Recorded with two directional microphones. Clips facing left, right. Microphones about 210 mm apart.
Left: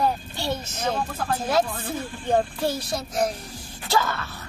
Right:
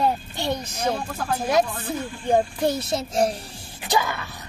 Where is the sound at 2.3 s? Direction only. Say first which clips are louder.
Right 2 dB; 15° right (ahead or behind).